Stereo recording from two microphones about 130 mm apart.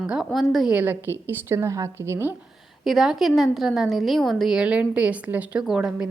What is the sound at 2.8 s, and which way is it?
A woman's voice, centre (ahead or behind).